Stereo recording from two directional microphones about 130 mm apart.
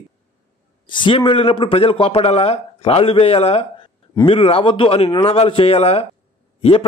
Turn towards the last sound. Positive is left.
turn(degrees=50)  # may be behind; listen again after turning